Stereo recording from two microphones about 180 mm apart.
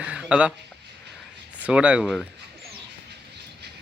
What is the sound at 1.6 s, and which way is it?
Speech, 5° right (ahead or behind).